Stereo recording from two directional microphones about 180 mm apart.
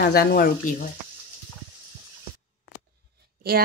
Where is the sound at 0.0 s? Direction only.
60° left (ahead or behind).